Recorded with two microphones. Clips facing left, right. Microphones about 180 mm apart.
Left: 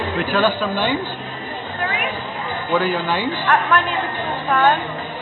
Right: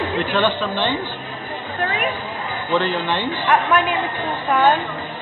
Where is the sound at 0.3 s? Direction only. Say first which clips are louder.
Left 3 dB; 5° left (ahead or behind).